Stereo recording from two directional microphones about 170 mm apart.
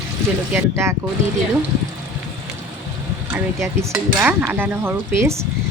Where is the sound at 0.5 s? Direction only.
15° right (ahead or behind).